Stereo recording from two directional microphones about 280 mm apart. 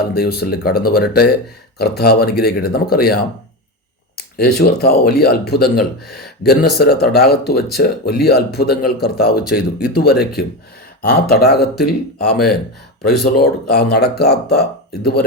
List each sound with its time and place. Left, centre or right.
0.0 s speech: left
4.4 s speech: left